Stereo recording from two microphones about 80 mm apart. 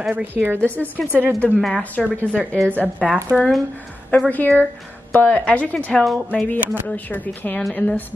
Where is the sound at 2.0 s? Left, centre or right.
Centre.